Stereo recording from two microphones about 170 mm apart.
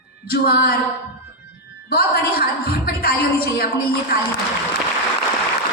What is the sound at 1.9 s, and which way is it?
A woman's voice, 65° left (ahead or behind).